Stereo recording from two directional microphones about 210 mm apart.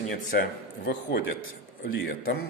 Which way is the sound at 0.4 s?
50° left (ahead or behind).